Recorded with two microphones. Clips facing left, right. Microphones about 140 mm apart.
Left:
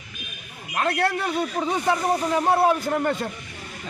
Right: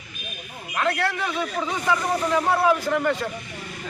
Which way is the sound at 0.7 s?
45° left (ahead or behind).